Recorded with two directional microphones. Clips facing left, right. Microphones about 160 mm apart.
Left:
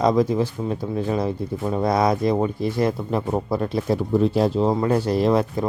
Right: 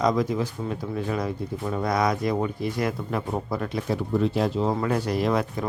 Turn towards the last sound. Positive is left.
turn(degrees=30)  # may be behind; listen again after turning